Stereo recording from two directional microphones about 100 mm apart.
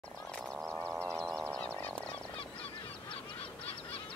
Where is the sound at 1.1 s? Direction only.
Centre (ahead or behind).